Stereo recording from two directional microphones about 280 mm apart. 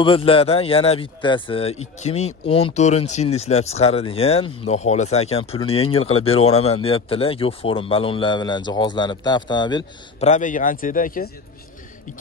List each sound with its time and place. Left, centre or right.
0.0 s speech: centre